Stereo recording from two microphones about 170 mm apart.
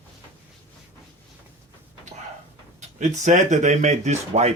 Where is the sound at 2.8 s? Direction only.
45° right (ahead or behind).